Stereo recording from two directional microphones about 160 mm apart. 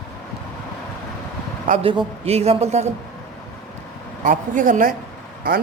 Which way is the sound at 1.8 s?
35° right (ahead or behind).